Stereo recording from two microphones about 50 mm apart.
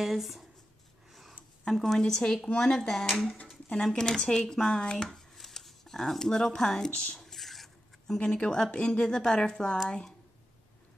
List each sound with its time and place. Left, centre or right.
0.0 s speech: centre
1.7 s speech: centre
6.9 s speech: left
7.2 s a sound: centre
8.2 s speech: centre